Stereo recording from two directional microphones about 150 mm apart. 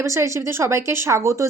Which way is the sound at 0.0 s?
20° right (ahead or behind).